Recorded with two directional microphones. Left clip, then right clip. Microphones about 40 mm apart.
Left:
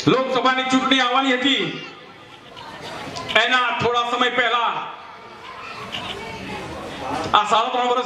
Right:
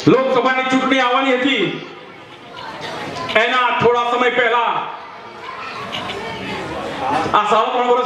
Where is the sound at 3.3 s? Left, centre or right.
Left.